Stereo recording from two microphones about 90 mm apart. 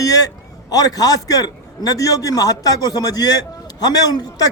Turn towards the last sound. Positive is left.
turn(degrees=45)  # may be behind; listen again after turning